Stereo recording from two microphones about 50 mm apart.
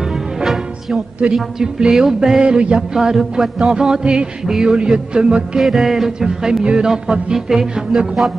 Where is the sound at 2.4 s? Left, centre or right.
Right.